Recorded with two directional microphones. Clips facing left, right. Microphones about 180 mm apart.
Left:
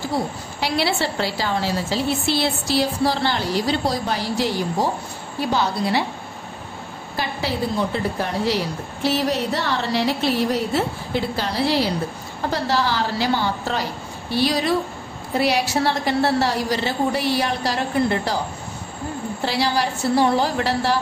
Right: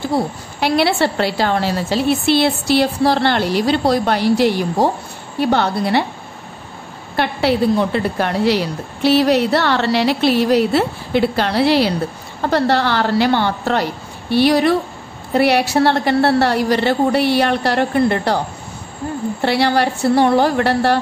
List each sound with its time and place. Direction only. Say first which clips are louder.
0.6 s a woman's voice: right 7 dB; 60° right (ahead or behind)
7.2 s a woman's voice: right 8 dB; 70° right (ahead or behind)
19.4 s a woman's voice: right 6 dB; 65° right (ahead or behind)